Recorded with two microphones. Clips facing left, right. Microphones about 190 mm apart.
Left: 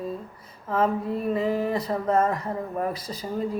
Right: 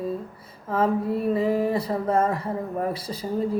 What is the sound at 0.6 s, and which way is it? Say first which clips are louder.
Speech: right 1 dB; 30° right (ahead or behind).